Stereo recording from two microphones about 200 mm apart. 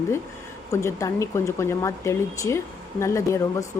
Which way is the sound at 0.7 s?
15° left (ahead or behind).